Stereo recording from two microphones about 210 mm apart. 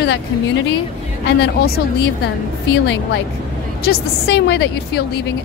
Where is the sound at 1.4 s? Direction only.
50° left (ahead or behind).